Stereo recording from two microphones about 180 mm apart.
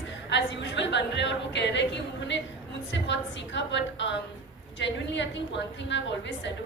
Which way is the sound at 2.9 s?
85° left.